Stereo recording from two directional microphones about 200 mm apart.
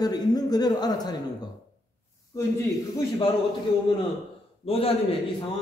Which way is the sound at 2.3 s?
15° left (ahead or behind).